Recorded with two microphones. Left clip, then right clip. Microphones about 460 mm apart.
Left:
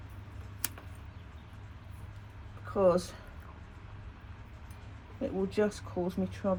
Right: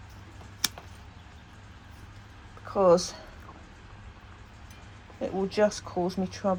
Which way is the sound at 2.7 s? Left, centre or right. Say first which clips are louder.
Right 5 dB; centre.